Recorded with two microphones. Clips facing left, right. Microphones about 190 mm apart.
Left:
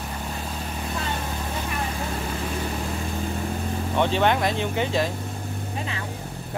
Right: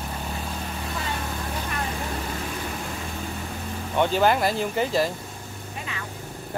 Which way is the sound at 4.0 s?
Centre (ahead or behind).